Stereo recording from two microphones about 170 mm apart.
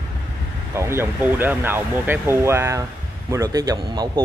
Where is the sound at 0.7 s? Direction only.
15° right (ahead or behind).